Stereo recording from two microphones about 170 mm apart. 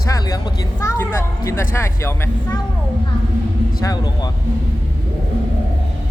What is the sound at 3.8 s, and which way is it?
Speech, 20° left (ahead or behind).